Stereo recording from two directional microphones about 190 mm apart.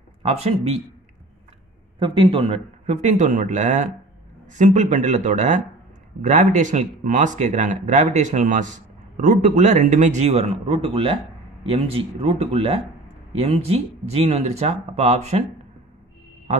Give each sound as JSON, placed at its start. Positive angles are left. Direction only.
{"t": 0.2, "sound": "speech", "side_deg": -35}
{"t": 2.0, "sound": "speech", "side_deg": -25}